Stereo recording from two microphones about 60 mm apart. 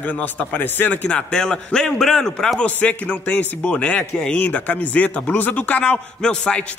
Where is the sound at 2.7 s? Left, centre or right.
Left.